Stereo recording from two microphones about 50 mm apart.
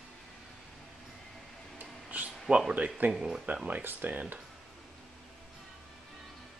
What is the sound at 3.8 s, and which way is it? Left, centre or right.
Speech, right.